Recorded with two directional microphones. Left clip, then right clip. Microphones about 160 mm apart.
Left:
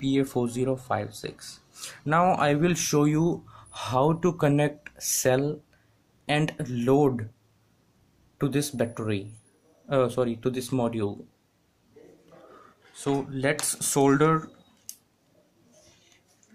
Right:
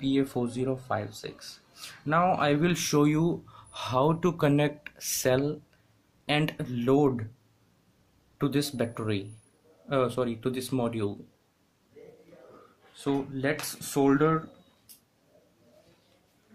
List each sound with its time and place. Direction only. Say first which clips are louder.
0.0 s speech: left 2 dB; 15° left (ahead or behind)
8.4 s speech: left 2 dB; 15° left (ahead or behind)
12.9 s speech: left 2 dB; 25° left (ahead or behind)